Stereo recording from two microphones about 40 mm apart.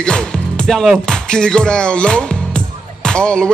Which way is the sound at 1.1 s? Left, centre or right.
Centre.